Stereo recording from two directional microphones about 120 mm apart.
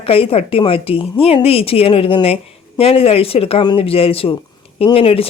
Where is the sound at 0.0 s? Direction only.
50° left (ahead or behind).